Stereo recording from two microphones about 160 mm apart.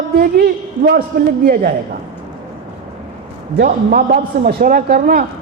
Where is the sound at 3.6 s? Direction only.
65° right (ahead or behind).